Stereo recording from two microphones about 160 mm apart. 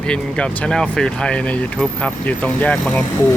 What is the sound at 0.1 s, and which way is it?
Speech, 5° left (ahead or behind).